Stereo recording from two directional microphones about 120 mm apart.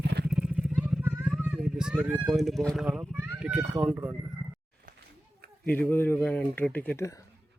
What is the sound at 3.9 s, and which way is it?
Speech, 20° right (ahead or behind).